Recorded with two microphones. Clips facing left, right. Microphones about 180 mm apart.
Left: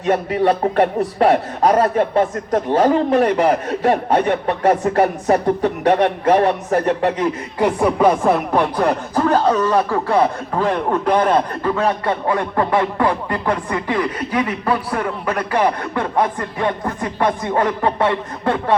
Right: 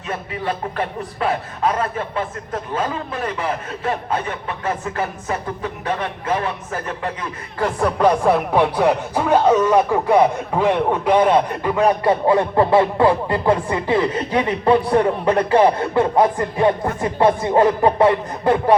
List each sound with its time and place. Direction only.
0.1 s speech: 40° left (ahead or behind)
5.8 s a man's voice: 70° left (ahead or behind)
6.2 s speech: 40° left (ahead or behind)
7.6 s speech: 10° left (ahead or behind); by 18.8 s 25° right (ahead or behind)